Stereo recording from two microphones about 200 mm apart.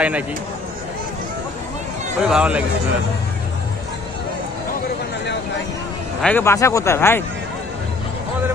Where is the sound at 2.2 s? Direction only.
5° right (ahead or behind).